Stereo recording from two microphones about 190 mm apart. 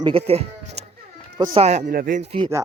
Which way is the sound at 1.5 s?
35° right (ahead or behind).